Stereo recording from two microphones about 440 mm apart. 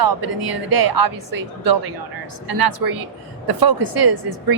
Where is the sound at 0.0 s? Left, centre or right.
Right.